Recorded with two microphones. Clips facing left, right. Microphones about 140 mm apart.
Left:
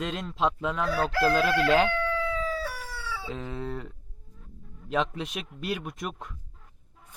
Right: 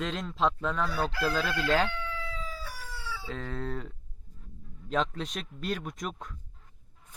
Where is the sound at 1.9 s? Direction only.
75° left (ahead or behind).